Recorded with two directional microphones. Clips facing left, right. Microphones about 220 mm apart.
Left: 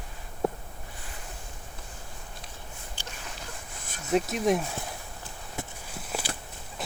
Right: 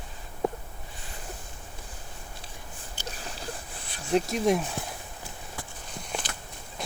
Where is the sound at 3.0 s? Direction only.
35° right (ahead or behind).